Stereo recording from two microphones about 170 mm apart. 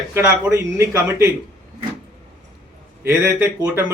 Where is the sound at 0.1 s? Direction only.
15° right (ahead or behind).